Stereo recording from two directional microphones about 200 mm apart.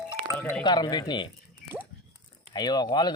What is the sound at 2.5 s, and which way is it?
Speech, 20° left (ahead or behind).